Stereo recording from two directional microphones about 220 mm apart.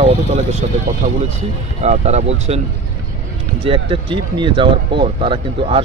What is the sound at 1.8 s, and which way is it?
Speech, 30° right (ahead or behind).